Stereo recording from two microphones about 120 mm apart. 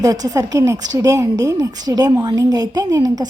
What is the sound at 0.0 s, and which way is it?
A woman's voice, 30° right (ahead or behind).